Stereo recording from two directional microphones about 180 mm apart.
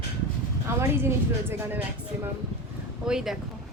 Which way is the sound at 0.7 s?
15° right (ahead or behind).